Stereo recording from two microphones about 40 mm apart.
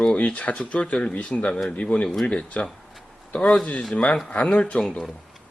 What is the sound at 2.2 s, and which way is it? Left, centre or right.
Speech, left.